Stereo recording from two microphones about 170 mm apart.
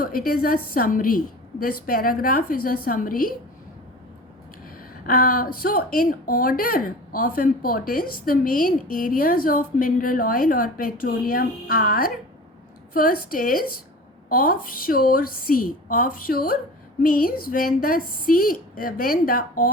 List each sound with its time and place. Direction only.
0.0 s speech: 60° left (ahead or behind)
5.0 s speech: 60° left (ahead or behind)